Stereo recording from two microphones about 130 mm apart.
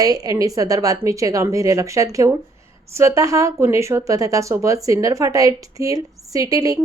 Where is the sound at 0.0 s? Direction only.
30° right (ahead or behind).